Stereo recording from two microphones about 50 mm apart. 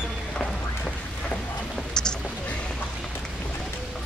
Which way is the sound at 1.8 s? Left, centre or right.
Centre.